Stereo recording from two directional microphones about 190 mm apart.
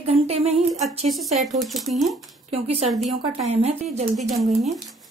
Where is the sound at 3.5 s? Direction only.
35° right (ahead or behind).